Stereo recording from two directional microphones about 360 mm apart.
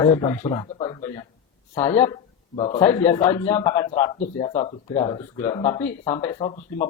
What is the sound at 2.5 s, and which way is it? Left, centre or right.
Speech, centre.